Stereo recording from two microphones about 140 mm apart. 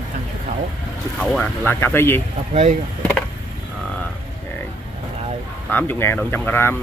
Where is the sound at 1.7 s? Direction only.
15° left (ahead or behind).